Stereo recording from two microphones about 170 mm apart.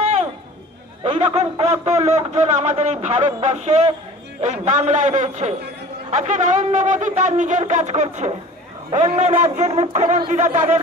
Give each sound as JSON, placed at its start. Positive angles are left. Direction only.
{"t": 0.0, "sound": "music", "side_deg": -35}
{"t": 1.0, "sound": "a man's voice", "side_deg": -35}